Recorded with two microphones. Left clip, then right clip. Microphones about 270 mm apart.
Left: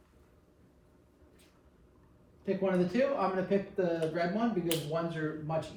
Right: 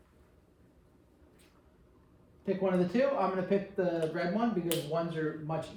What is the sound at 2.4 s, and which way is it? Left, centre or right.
A man's voice, centre.